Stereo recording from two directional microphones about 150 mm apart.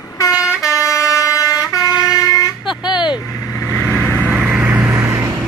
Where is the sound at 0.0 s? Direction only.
25° left (ahead or behind).